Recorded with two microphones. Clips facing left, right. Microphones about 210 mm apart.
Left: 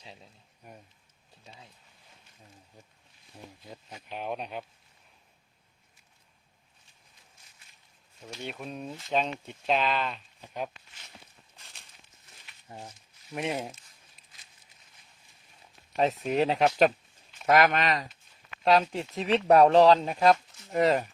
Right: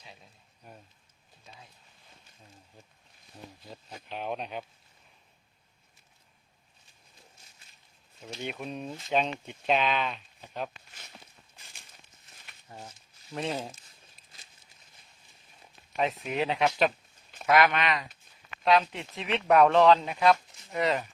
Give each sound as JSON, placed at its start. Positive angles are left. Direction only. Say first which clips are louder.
{"t": 0.0, "sound": "a sound", "louder": "left 3 dB", "side_deg": 25}
{"t": 4.1, "sound": "speech", "louder": "even", "side_deg": 5}
{"t": 8.4, "sound": "speech", "louder": "right 1 dB", "side_deg": 0}
{"t": 12.6, "sound": "speech", "louder": "left 2 dB", "side_deg": 25}
{"t": 13.3, "sound": "speech", "louder": "left 1 dB", "side_deg": 15}
{"t": 16.0, "sound": "speech", "louder": "left 4 dB", "side_deg": 40}